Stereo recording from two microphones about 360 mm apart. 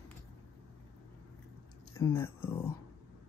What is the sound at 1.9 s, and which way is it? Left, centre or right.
Speech, centre.